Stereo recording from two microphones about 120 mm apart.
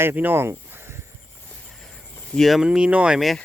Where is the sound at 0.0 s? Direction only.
15° right (ahead or behind).